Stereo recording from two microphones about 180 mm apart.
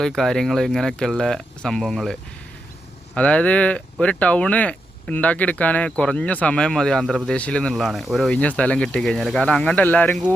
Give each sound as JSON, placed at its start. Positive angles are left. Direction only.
{"t": 0.0, "sound": "speech", "side_deg": 0}
{"t": 3.2, "sound": "speech", "side_deg": 5}